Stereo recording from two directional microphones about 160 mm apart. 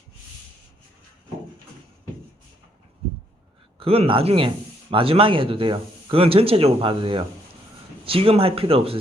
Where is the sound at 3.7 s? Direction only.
35° right (ahead or behind).